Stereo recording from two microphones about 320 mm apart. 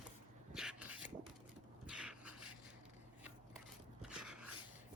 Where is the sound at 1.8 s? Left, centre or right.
Centre.